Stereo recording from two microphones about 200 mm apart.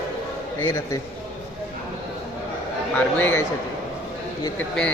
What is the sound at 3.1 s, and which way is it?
Speech, 10° left (ahead or behind).